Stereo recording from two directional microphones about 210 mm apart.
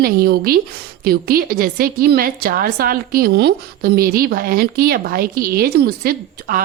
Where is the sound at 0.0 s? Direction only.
45° right (ahead or behind).